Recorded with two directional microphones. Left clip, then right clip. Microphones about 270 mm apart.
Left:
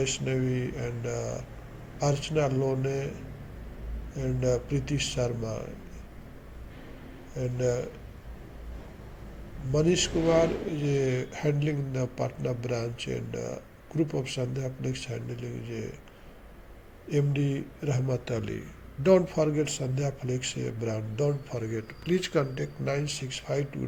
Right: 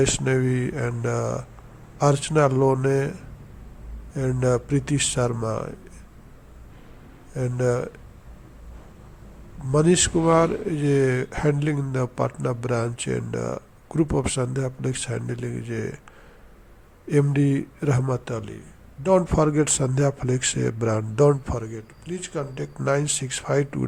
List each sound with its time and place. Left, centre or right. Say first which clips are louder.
0.0 s speech: right 8 dB; right
4.1 s speech: right 5 dB; right
7.3 s speech: right 5 dB; right
9.7 s speech: right 6 dB; right
17.1 s speech: right 8 dB; right
18.3 s speech: even; centre
19.3 s speech: right 6 dB; right
21.6 s speech: left 1 dB; centre
22.5 s speech: right 7 dB; centre